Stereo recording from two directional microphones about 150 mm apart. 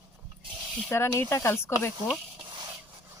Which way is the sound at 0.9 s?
15° left (ahead or behind).